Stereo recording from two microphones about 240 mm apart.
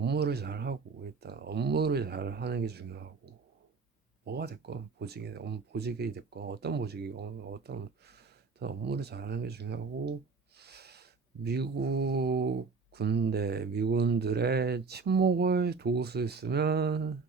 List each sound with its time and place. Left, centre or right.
0.0 s speech: right
4.3 s speech: right
10.6 s snort: right
11.4 s speech: right